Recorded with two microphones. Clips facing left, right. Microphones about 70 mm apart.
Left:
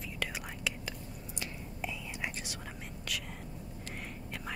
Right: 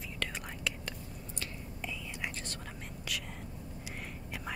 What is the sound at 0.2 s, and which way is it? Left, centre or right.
Whispering, centre.